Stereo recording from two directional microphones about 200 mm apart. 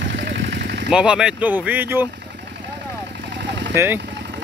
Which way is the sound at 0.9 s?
5° right (ahead or behind).